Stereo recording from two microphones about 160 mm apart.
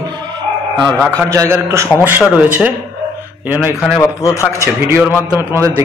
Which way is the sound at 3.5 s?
15° left (ahead or behind).